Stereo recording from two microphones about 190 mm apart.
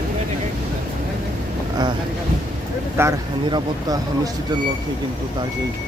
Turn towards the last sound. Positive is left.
turn(degrees=-25)  # may be behind; listen again after turning